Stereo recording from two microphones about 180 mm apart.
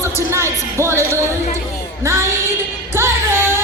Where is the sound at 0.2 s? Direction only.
15° right (ahead or behind).